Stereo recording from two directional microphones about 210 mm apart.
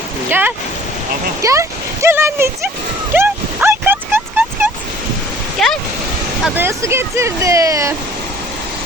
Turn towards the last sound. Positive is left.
turn(degrees=-15)  # may be behind; listen again after turning